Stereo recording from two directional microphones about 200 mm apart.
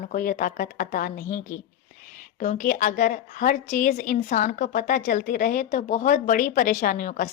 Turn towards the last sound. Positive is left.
turn(degrees=40)  # may be behind; listen again after turning